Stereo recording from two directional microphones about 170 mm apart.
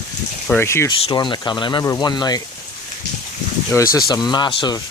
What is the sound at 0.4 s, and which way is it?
Speech, 10° left (ahead or behind).